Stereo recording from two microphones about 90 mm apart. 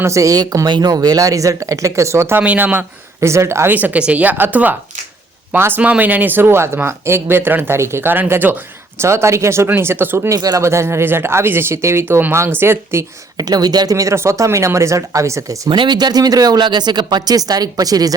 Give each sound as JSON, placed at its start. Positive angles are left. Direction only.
{"t": 0.0, "sound": "speech", "side_deg": -35}
{"t": 2.4, "sound": "speech", "side_deg": -15}
{"t": 3.2, "sound": "speech", "side_deg": -30}
{"t": 3.8, "sound": "speech", "side_deg": -15}
{"t": 9.0, "sound": "speech", "side_deg": -30}
{"t": 10.2, "sound": "speech", "side_deg": -40}
{"t": 13.3, "sound": "speech", "side_deg": -45}
{"t": 15.7, "sound": "speech", "side_deg": -55}